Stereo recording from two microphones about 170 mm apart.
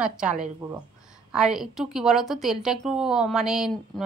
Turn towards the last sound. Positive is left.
turn(degrees=0)  # may be behind; listen again after turning